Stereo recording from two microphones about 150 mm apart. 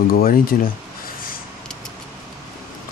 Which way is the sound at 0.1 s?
75° left (ahead or behind).